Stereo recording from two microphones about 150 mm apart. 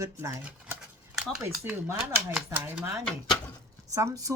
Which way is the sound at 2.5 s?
15° right (ahead or behind).